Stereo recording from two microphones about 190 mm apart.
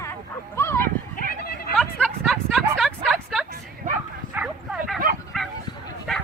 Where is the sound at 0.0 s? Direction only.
15° left (ahead or behind).